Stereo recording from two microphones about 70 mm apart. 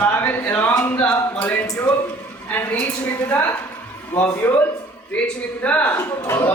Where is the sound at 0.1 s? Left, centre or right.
Left.